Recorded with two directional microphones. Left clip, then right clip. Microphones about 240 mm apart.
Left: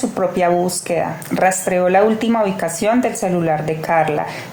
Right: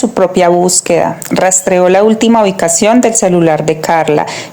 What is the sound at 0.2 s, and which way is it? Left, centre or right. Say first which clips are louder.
A woman's voice: right 8 dB; right.